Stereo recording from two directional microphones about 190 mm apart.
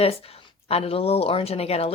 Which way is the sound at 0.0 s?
30° left (ahead or behind).